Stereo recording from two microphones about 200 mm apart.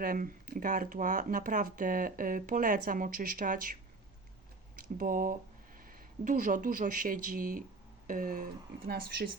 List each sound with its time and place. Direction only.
0.0 s speech: 45° right (ahead or behind)
4.8 s speech: 45° right (ahead or behind)